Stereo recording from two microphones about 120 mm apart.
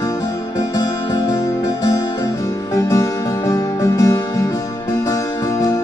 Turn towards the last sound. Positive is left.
turn(degrees=25)  # may be behind; listen again after turning